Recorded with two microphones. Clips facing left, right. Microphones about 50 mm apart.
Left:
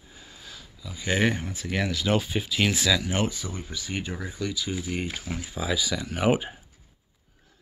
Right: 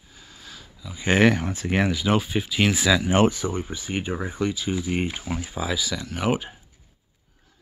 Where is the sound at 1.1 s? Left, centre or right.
Right.